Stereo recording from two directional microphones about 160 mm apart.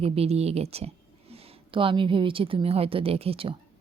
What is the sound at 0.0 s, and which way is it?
Speech, 40° right (ahead or behind).